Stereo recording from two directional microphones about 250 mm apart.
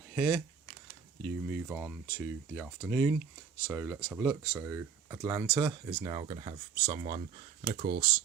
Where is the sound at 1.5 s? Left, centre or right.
Centre.